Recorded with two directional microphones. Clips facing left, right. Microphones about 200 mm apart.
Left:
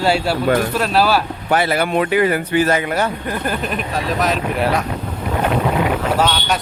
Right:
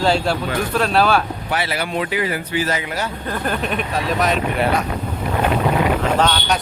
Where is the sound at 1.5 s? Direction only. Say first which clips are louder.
Left 7 dB; 50° left (ahead or behind).